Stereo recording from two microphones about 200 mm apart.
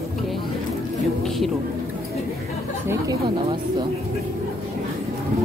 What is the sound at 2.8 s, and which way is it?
Speech, 20° right (ahead or behind).